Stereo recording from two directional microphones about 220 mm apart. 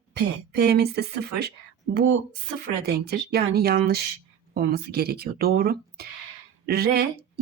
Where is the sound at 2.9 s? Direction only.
45° right (ahead or behind).